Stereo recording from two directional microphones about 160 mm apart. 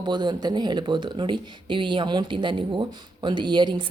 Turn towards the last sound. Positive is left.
turn(degrees=-30)  # may be behind; listen again after turning